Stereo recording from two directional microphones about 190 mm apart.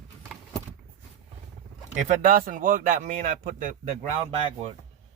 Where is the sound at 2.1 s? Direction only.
45° right (ahead or behind).